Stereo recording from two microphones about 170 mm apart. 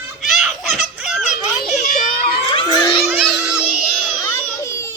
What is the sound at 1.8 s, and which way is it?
Children playing, 50° left (ahead or behind).